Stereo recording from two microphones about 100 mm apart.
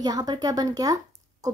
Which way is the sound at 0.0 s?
40° right (ahead or behind).